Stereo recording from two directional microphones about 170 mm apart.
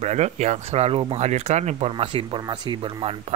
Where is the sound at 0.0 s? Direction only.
40° right (ahead or behind).